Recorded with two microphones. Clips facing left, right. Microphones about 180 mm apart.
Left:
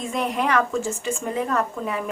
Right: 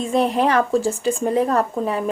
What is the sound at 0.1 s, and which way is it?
Speech, 30° right (ahead or behind).